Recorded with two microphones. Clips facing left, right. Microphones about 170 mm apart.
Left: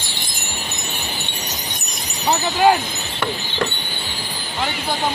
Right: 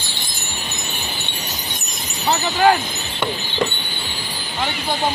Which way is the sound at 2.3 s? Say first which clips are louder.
Even; 5° left (ahead or behind).